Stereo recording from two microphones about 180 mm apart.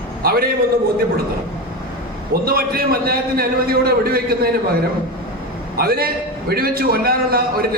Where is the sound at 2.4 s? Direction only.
55° right (ahead or behind).